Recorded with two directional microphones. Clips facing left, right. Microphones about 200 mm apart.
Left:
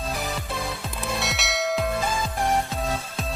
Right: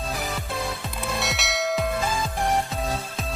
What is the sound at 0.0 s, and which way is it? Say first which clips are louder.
Music: even; centre (ahead or behind).